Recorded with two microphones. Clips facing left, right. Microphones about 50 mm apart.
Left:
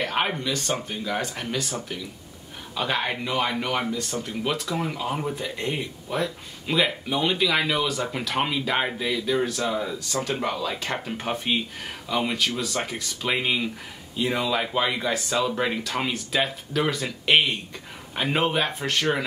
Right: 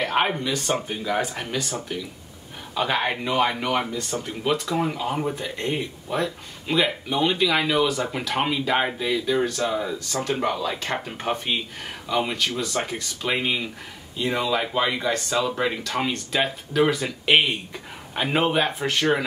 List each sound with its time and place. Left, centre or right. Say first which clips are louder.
0.0 s speech: right 3 dB; centre
4.1 s speech: right 1 dB; centre
4.6 s speech: right 3 dB; centre